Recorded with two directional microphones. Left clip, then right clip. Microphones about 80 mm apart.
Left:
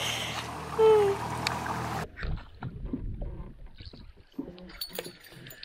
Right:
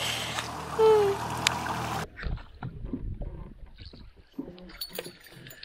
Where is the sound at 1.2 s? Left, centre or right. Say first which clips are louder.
Right 3 dB; centre.